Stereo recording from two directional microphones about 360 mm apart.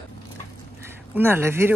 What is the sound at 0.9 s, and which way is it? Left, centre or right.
Speech, centre.